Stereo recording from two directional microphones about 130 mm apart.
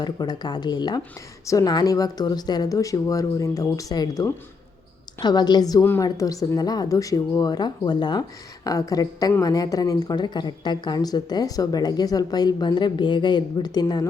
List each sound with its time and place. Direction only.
0.0 s a woman's voice: 30° left (ahead or behind)